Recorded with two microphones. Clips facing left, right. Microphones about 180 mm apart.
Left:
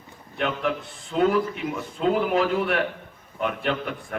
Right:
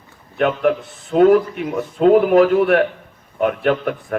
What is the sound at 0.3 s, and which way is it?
A man's voice, 50° right (ahead or behind).